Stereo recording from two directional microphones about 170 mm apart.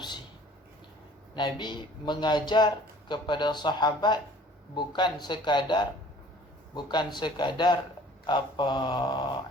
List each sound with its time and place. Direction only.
1.4 s a man's voice: 25° left (ahead or behind)